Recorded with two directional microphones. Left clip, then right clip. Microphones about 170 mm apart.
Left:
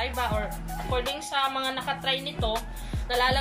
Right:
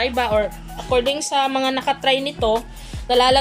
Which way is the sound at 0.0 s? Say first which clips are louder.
Right 9 dB; 45° right (ahead or behind).